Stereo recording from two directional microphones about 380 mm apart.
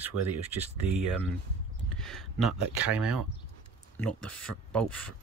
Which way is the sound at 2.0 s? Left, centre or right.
Centre.